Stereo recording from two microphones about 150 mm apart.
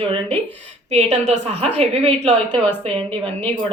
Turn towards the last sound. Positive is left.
turn(degrees=-40)  # may be behind; listen again after turning